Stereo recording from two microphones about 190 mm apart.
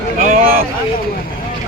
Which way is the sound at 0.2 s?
45° right (ahead or behind).